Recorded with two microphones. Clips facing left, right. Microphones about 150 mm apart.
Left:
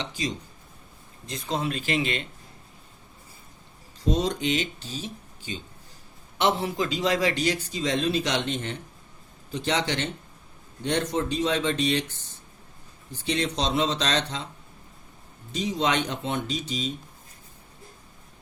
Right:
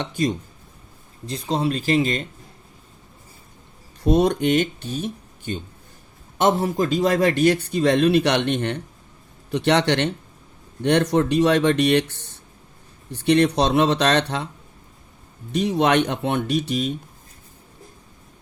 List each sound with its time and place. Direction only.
0.0 s speech: 55° right (ahead or behind)
1.3 s speech: 35° right (ahead or behind)
4.0 s speech: 60° right (ahead or behind)
15.5 s speech: 60° right (ahead or behind)